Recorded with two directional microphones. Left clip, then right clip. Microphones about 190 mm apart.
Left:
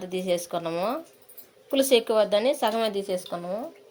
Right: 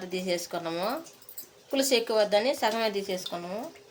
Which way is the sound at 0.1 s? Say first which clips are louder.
Left 4 dB; 35° left (ahead or behind).